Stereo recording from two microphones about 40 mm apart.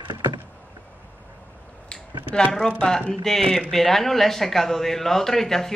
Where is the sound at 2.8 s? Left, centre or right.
Centre.